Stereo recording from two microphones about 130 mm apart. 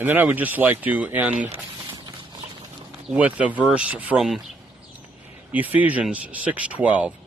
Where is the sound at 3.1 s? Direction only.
10° right (ahead or behind).